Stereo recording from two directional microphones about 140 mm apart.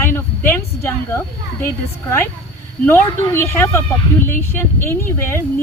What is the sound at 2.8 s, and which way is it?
Speech, 15° left (ahead or behind).